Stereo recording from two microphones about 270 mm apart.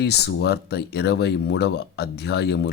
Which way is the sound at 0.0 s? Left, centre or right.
Left.